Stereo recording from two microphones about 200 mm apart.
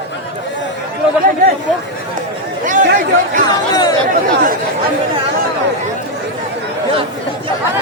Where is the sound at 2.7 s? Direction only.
40° right (ahead or behind).